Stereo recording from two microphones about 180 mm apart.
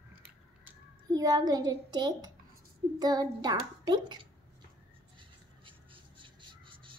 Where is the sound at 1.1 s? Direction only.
20° right (ahead or behind).